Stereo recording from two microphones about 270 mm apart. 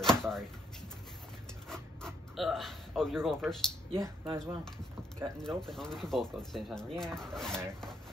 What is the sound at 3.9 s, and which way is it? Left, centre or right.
Speech, centre.